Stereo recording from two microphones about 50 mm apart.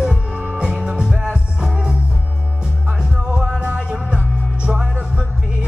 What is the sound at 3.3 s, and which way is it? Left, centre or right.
Music, centre.